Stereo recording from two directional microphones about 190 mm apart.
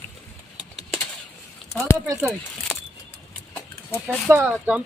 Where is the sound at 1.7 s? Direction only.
15° left (ahead or behind).